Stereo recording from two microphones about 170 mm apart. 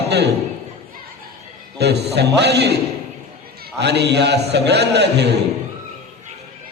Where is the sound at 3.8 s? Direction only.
80° right.